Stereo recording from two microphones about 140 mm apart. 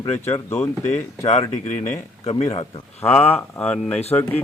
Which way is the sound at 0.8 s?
55° left (ahead or behind).